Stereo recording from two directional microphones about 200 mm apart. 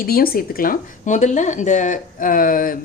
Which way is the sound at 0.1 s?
50° left (ahead or behind).